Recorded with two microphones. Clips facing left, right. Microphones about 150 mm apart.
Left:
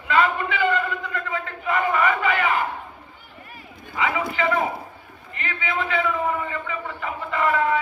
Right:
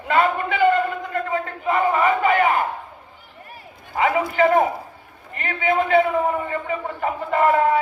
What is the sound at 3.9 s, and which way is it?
A man's voice, 45° right (ahead or behind).